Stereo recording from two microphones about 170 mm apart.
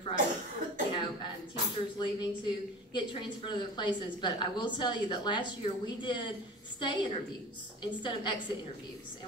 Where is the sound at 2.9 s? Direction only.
25° left (ahead or behind).